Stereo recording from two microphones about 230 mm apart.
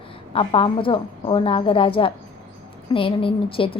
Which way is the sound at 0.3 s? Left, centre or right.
Left.